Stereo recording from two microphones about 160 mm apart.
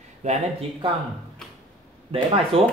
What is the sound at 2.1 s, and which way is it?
Speech, 35° right (ahead or behind).